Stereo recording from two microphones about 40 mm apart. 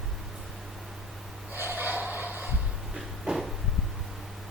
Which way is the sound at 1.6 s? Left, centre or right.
Right.